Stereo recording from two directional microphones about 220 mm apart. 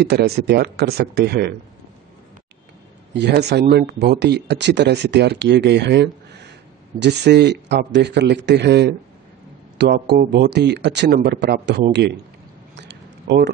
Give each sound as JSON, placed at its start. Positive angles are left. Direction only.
{"t": 0.0, "sound": "speech", "side_deg": -45}
{"t": 3.1, "sound": "speech", "side_deg": -50}
{"t": 13.3, "sound": "speech", "side_deg": -50}